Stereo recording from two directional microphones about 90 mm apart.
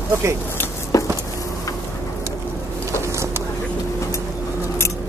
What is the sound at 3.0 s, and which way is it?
Vehicle, 30° right (ahead or behind).